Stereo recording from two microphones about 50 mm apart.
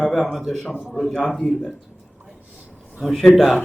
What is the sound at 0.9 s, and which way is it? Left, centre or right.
Speech, centre.